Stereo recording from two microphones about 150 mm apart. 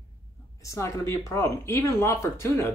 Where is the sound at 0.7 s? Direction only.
20° left (ahead or behind).